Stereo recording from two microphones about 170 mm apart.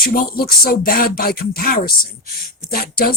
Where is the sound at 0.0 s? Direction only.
60° left (ahead or behind).